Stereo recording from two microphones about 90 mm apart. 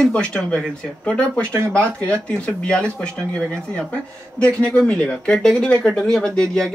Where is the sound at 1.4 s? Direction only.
30° right (ahead or behind).